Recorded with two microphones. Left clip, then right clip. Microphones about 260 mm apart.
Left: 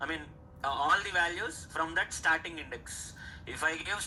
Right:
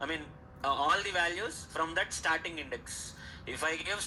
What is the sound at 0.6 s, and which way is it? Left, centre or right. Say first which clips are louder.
Speech: even; centre.